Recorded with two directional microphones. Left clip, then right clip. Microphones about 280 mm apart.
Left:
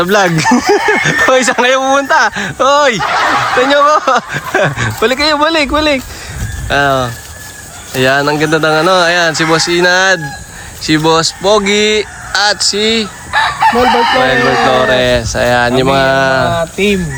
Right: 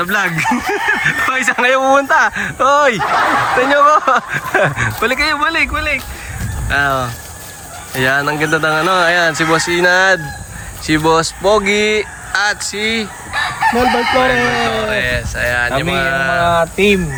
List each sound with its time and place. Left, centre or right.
0.0 s speech: centre
13.3 s chicken: centre
13.8 s speech: centre
14.2 s speech: centre
14.7 s speech: centre
16.5 s speech: centre